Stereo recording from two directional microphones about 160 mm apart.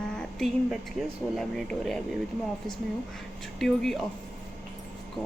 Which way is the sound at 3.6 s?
Centre (ahead or behind).